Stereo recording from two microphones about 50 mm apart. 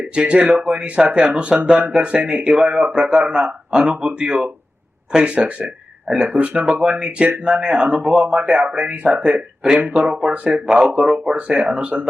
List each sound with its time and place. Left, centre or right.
0.1 s speech: right
6.5 s speech: centre